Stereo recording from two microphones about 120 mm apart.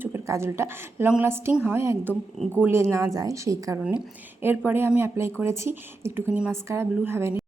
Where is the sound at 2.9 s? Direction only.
30° right (ahead or behind).